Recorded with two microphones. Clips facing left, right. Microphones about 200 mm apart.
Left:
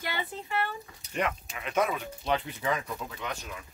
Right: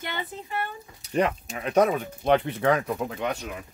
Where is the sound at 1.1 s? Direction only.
40° right (ahead or behind); by 3.6 s 60° right (ahead or behind).